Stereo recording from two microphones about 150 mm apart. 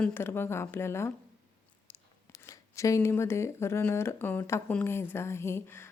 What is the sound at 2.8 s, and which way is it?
A woman's voice, 20° left (ahead or behind).